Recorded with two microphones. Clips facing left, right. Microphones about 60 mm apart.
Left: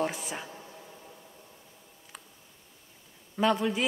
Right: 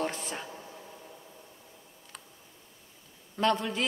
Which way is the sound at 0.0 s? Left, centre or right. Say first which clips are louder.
Left 2 dB; centre.